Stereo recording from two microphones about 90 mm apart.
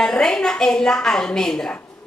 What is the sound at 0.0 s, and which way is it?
A woman's voice, 5° left (ahead or behind).